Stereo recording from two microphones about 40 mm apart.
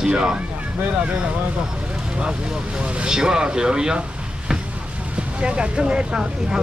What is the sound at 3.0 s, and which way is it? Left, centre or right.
Speech, centre.